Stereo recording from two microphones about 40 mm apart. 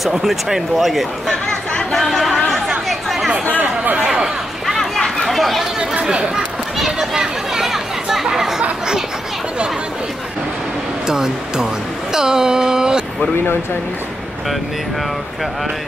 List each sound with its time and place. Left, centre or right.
0.0 s speech: centre
1.8 s chatter: centre
2.0 s speech: centre
2.3 s chatter: centre
2.9 s chatter: centre
3.5 s chatter: right
4.0 s chatter: centre
4.6 s a sound: centre
5.9 s speech: right
6.3 s children playing: centre
11.1 s a sound: centre